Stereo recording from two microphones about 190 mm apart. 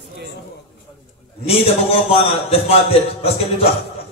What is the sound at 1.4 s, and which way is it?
A man's voice, 30° left (ahead or behind).